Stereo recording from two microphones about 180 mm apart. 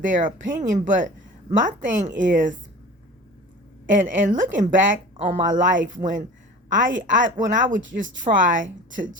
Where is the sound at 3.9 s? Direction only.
45° right (ahead or behind).